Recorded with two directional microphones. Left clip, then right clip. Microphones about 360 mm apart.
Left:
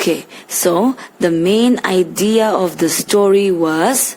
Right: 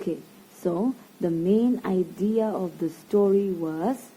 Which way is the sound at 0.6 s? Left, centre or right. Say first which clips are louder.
Left 13 dB; left.